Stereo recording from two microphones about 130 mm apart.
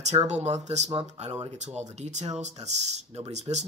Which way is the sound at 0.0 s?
60° right (ahead or behind).